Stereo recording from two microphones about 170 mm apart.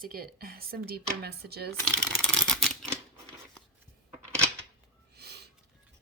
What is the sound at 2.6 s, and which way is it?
Typewriter, 5° left (ahead or behind).